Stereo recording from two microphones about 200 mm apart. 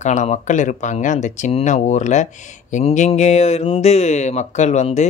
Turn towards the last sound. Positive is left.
turn(degrees=35)  # may be behind; listen again after turning